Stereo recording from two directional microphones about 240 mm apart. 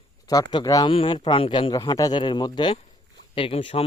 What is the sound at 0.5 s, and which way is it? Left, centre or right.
A man's voice, centre.